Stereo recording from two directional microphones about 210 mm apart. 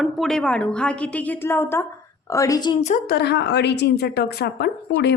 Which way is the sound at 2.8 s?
35° left (ahead or behind).